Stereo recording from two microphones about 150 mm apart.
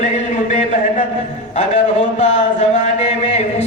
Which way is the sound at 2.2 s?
50° left (ahead or behind).